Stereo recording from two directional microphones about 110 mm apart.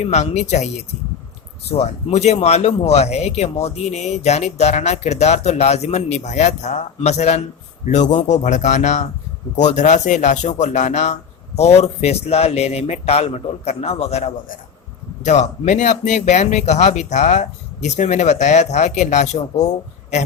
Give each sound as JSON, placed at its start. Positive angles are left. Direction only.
{"t": 0.0, "sound": "speech", "side_deg": 90}
{"t": 1.7, "sound": "speech", "side_deg": 75}
{"t": 15.2, "sound": "speech", "side_deg": 90}